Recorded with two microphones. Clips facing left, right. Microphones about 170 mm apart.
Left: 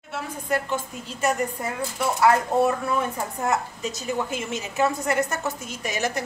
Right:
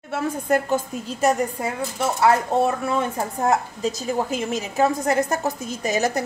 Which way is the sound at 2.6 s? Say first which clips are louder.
Right 1 dB; 30° right (ahead or behind).